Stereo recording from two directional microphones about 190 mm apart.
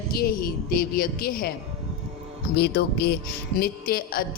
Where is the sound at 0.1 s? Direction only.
50° left (ahead or behind).